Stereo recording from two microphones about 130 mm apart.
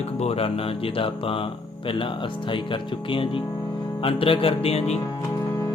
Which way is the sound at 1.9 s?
40° left (ahead or behind).